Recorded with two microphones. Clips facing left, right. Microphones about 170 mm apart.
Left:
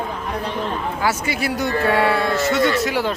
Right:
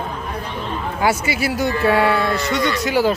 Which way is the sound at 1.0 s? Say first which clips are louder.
Right 3 dB; 5° right (ahead or behind).